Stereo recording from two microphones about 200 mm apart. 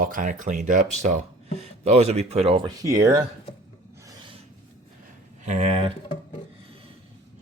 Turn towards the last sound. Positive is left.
turn(degrees=-30)  # may be behind; listen again after turning